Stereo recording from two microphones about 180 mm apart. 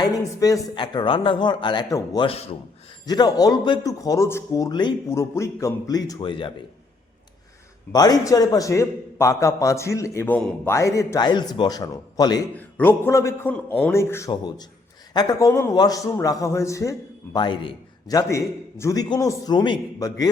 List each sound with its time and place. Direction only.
0.0 s a man's voice: 20° left (ahead or behind)
2.2 s speech: 35° left (ahead or behind)
3.1 s a man's voice: 20° left (ahead or behind)
7.9 s a man's voice: 20° left (ahead or behind)
12.5 s a man's voice: 10° left (ahead or behind)